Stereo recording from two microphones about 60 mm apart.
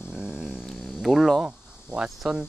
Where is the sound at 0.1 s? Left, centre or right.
Centre.